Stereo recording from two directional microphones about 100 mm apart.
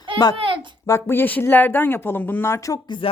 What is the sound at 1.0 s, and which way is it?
Speech, 20° left (ahead or behind).